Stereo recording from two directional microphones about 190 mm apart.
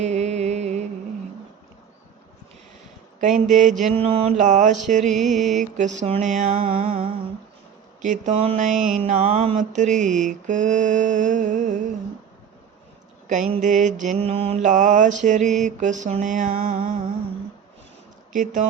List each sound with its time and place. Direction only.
0.0 s music: 35° right (ahead or behind)
3.2 s mantra: 40° right (ahead or behind)
6.8 s humming: 30° right (ahead or behind)
8.0 s mantra: 40° right (ahead or behind)
13.2 s mantra: 40° right (ahead or behind)